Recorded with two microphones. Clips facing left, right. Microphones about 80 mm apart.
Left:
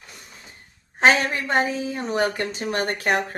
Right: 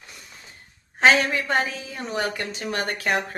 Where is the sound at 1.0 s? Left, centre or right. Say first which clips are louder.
Even; left.